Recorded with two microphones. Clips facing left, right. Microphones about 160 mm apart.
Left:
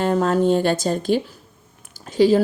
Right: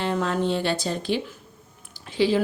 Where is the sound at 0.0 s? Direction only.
45° left (ahead or behind).